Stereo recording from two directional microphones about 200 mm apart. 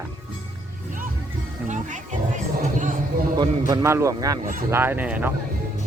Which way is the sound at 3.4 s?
20° right (ahead or behind).